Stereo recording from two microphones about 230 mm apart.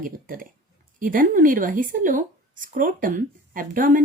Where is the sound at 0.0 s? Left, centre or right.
Right.